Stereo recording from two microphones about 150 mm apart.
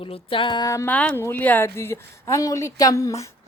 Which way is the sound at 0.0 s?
35° left (ahead or behind).